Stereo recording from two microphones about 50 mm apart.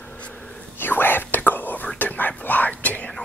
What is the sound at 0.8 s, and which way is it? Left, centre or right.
Whispering, left.